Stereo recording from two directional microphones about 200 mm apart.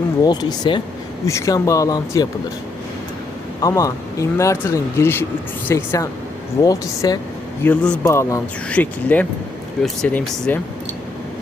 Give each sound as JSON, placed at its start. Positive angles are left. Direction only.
{"t": 0.2, "sound": "speech", "side_deg": 20}
{"t": 3.6, "sound": "speech", "side_deg": 15}